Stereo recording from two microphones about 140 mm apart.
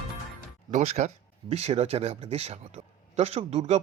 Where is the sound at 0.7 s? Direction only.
55° right (ahead or behind).